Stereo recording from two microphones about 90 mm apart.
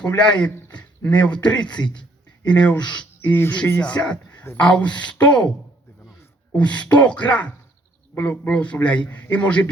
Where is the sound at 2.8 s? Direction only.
60° left (ahead or behind).